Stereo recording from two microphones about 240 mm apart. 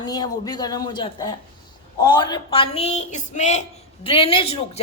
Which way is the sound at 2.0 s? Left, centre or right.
Centre.